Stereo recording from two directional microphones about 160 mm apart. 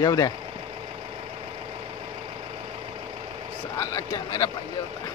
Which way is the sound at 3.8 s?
20° left (ahead or behind).